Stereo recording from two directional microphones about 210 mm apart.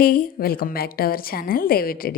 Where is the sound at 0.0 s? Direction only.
45° left (ahead or behind).